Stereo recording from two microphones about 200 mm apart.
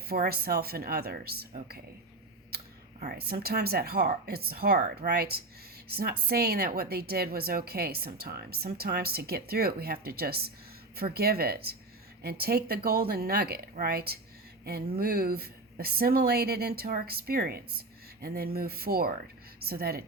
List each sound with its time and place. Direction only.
0.1 s a woman's voice: 50° right (ahead or behind)
3.0 s a woman's voice: 50° right (ahead or behind)